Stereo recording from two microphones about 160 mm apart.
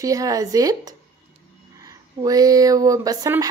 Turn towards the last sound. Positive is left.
turn(degrees=-20)  # may be behind; listen again after turning